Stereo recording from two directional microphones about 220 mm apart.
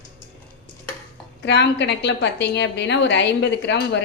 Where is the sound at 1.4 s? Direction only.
50° left (ahead or behind).